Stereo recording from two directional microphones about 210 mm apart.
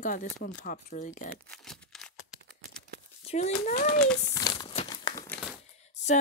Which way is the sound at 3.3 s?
30° left (ahead or behind).